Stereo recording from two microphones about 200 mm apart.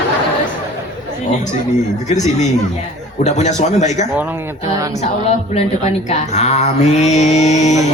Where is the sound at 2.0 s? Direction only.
35° left (ahead or behind).